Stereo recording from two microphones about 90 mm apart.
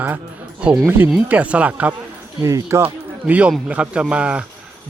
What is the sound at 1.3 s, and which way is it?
Speech, 15° right (ahead or behind).